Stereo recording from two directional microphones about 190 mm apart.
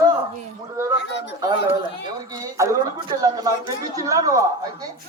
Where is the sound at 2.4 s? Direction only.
20° right (ahead or behind).